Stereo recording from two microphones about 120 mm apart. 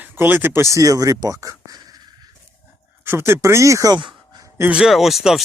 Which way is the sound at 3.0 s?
20° right (ahead or behind).